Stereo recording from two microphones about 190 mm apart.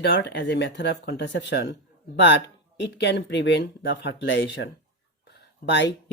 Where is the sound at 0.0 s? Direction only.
65° left (ahead or behind).